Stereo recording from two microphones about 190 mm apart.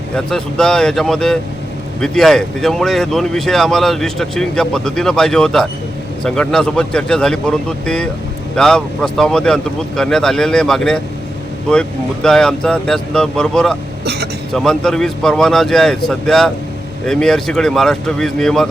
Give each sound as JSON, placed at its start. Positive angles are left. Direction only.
{"t": 0.3, "sound": "speech", "side_deg": 5}
{"t": 14.0, "sound": "speech", "side_deg": -60}
{"t": 14.5, "sound": "speech", "side_deg": 0}